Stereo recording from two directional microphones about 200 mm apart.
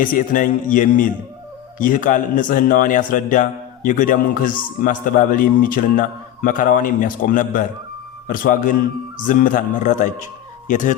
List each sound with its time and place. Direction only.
0.0 s a man's voice: 40° left (ahead or behind)